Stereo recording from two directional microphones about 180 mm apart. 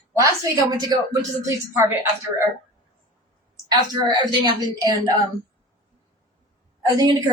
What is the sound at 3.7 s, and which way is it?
Speech, 25° right (ahead or behind).